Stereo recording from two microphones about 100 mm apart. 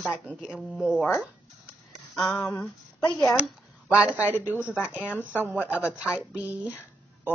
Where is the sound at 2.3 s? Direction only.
30° left (ahead or behind).